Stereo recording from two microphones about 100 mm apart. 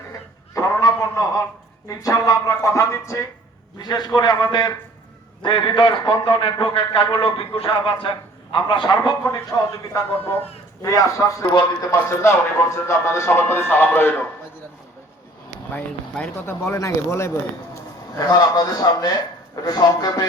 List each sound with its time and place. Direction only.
0.5 s a sound: 35° left (ahead or behind)
1.9 s speech: 35° left (ahead or behind)
3.8 s a man's voice: 45° left (ahead or behind)
9.2 s speech: 35° left (ahead or behind)
16.5 s speech: 30° left (ahead or behind)
18.3 s speech: 40° left (ahead or behind)